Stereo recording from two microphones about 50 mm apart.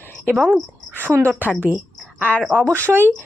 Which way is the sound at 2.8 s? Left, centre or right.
Right.